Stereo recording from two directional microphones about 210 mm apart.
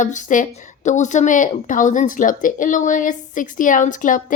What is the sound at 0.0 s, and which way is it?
A woman's voice, 35° left (ahead or behind).